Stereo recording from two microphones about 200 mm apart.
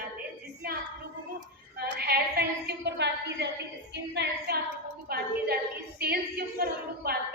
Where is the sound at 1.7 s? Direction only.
50° right (ahead or behind).